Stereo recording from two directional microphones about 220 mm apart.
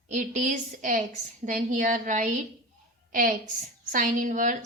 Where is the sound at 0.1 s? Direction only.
35° right (ahead or behind).